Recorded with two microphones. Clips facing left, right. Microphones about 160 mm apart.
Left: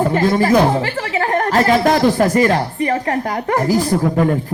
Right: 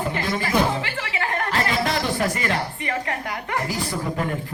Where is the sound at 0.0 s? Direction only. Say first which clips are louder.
Left 11 dB; 45° left (ahead or behind).